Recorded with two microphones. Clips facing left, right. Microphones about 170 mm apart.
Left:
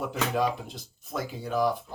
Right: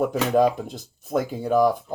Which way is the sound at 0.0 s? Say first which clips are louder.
Right 8 dB; 45° right (ahead or behind).